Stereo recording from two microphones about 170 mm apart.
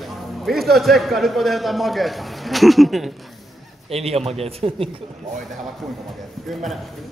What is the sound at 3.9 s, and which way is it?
A man's voice, 35° right (ahead or behind).